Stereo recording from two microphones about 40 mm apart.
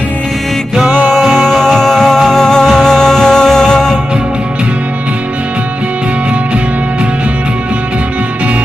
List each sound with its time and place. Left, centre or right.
1.1 s music: centre